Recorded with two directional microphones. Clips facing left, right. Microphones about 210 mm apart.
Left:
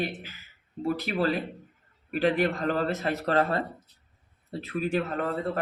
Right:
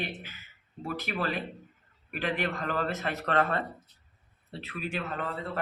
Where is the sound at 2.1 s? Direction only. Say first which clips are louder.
Left 7 dB; 35° left (ahead or behind).